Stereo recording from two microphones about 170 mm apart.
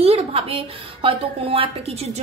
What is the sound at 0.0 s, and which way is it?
A woman's voice, 35° right (ahead or behind).